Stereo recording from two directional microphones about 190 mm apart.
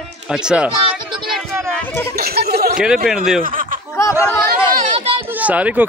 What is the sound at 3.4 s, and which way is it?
Snicker, 45° right (ahead or behind).